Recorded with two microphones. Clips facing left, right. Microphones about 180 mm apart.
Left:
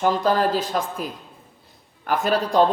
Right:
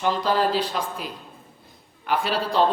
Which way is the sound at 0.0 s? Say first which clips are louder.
Left 2 dB; 45° left (ahead or behind).